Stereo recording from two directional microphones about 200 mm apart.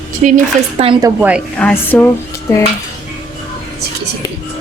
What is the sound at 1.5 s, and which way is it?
Music, 10° left (ahead or behind).